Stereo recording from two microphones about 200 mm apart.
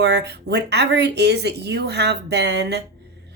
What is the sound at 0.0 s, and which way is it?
A woman's voice, 55° right (ahead or behind).